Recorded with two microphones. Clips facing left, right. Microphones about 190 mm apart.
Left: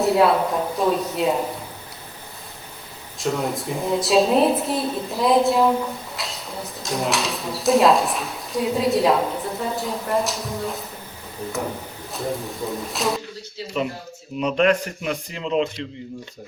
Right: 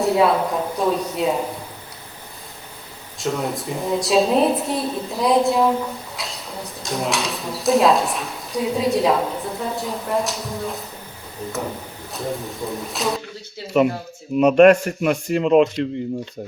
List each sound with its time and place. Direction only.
0.0 s speech: centre (ahead or behind)
3.2 s speech: centre (ahead or behind)
12.1 s speech: centre (ahead or behind)
14.3 s a man's voice: 55° right (ahead or behind)